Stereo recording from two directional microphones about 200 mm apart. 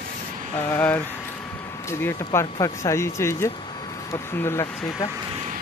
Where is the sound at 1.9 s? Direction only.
15° left (ahead or behind).